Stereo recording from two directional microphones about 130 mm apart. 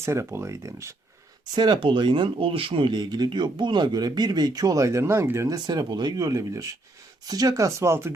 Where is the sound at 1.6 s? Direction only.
40° right (ahead or behind).